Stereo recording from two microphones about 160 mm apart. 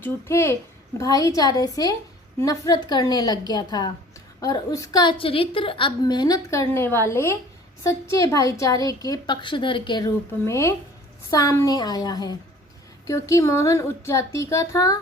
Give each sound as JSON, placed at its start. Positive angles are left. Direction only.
{"t": 0.0, "sound": "a woman's voice", "side_deg": 15}
{"t": 10.4, "sound": "a woman's voice", "side_deg": 20}